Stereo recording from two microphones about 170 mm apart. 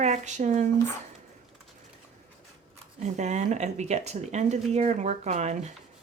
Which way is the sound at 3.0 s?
45° right (ahead or behind).